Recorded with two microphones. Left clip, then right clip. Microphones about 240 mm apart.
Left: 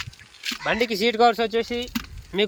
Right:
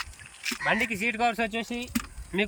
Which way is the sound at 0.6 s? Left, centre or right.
Left.